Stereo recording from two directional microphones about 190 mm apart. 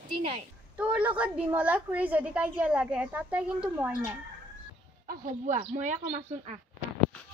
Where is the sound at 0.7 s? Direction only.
5° right (ahead or behind).